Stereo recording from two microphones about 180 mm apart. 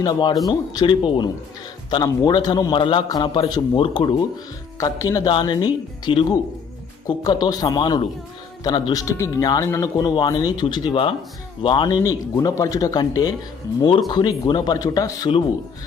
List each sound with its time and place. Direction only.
0.0 s speech: 25° left (ahead or behind)
4.8 s speech: 15° left (ahead or behind)